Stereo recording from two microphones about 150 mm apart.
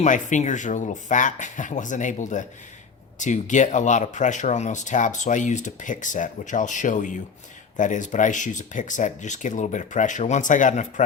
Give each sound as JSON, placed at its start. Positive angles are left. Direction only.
{"t": 0.0, "sound": "speech", "side_deg": 55}